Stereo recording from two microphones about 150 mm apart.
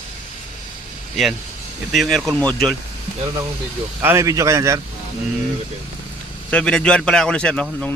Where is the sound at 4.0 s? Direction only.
15° right (ahead or behind).